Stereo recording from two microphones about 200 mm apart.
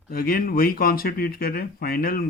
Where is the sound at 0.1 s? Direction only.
45° left (ahead or behind).